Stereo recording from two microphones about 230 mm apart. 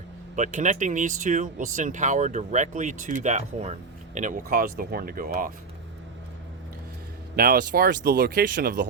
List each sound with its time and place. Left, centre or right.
0.3 s speech: right
7.3 s speech: right